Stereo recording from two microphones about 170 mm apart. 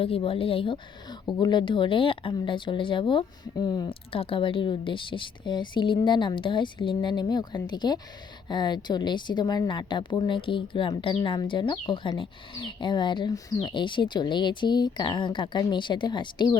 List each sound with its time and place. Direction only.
0.0 s a woman's voice: 35° left (ahead or behind)